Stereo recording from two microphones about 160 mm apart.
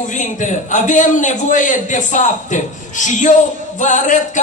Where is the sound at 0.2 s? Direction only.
50° left (ahead or behind).